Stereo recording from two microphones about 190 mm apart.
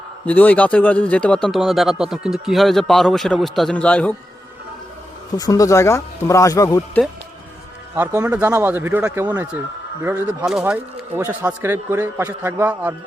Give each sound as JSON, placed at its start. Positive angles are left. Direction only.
{"t": 0.3, "sound": "a man's voice", "side_deg": 10}
{"t": 5.4, "sound": "speech", "side_deg": 20}
{"t": 7.9, "sound": "a man's voice", "side_deg": -10}